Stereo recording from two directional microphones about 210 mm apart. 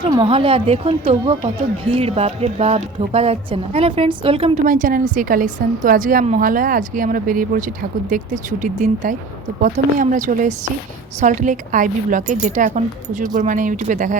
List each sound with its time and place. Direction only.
0.0 s speech: 20° right (ahead or behind)
4.6 s a woman's voice: 40° right (ahead or behind)